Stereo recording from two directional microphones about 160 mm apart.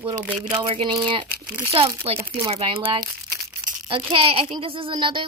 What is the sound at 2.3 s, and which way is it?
Speech, 35° right (ahead or behind).